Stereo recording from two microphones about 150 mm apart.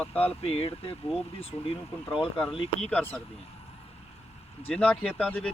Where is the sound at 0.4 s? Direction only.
40° left (ahead or behind).